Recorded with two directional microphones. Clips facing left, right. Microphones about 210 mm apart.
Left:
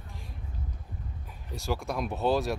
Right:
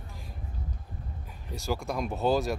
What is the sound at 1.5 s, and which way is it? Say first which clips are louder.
Speech: even; centre (ahead or behind).